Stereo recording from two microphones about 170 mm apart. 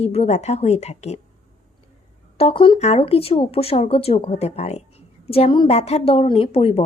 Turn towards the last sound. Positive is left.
turn(degrees=35)  # may be behind; listen again after turning